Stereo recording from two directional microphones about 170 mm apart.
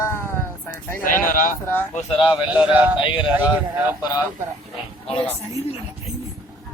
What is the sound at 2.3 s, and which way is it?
Speech, 10° right (ahead or behind).